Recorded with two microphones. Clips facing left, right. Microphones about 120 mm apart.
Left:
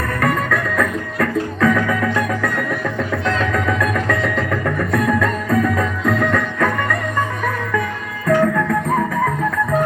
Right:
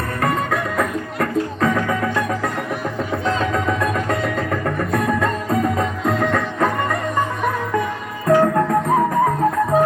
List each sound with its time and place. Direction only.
0.2 s music: 25° right (ahead or behind)
8.3 s music: 40° right (ahead or behind)